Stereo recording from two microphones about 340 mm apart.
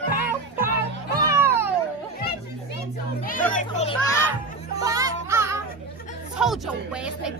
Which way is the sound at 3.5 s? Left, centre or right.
Centre.